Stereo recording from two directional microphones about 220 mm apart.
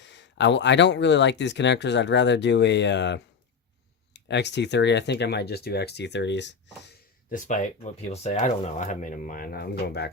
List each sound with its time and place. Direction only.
0.0 s speech: 55° left (ahead or behind)
7.3 s speech: 35° left (ahead or behind)